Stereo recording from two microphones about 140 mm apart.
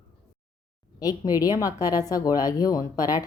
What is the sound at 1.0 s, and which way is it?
A woman's voice, 25° left (ahead or behind).